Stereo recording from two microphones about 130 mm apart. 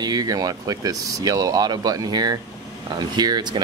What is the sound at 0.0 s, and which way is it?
Speech, 30° right (ahead or behind).